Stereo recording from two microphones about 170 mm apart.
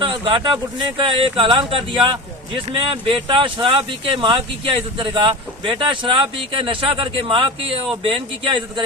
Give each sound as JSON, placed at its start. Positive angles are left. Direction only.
{"t": 0.0, "sound": "speech", "side_deg": -30}